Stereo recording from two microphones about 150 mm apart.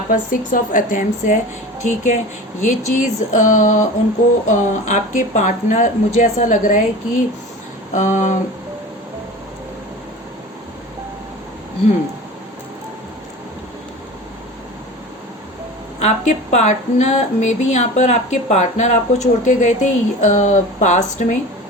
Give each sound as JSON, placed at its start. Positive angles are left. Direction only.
{"t": 0.1, "sound": "a woman's voice", "side_deg": 65}
{"t": 16.0, "sound": "a woman's voice", "side_deg": 50}